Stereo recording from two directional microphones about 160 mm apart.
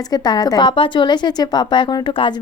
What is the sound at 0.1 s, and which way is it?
A woman's voice, 25° left (ahead or behind).